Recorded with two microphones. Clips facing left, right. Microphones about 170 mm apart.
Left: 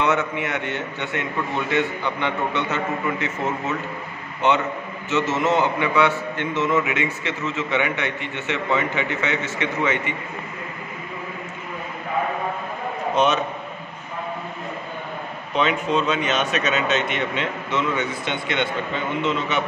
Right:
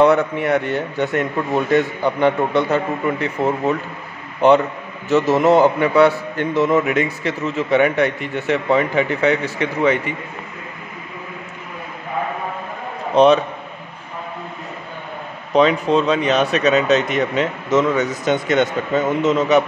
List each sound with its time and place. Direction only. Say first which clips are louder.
0.0 s a man's voice: right 8 dB; 35° right (ahead or behind)
5.1 s a man's voice: right 7 dB; 35° right (ahead or behind)
13.1 s a man's voice: right 8 dB; 35° right (ahead or behind)
15.5 s a man's voice: right 7 dB; 35° right (ahead or behind)